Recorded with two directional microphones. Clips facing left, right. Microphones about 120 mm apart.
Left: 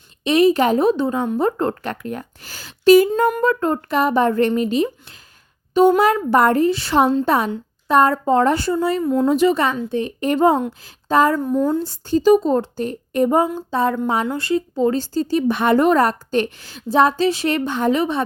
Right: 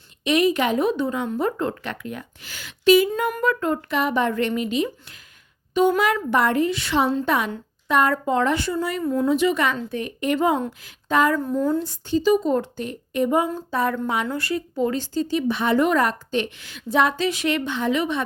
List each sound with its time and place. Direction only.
0.3 s a woman's voice: 30° left (ahead or behind)
9.2 s a woman's voice: 40° left (ahead or behind)
11.4 s speech: 20° left (ahead or behind)
11.9 s a woman's voice: 45° left (ahead or behind)
13.7 s a woman's voice: 25° left (ahead or behind); by 15.8 s 50° left (ahead or behind)
15.8 s a woman's voice: 35° left (ahead or behind)